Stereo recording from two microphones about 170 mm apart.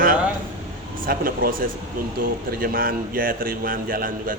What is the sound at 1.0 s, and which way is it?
Speech, 55° right (ahead or behind).